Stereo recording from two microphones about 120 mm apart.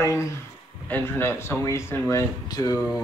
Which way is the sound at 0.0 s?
25° left (ahead or behind).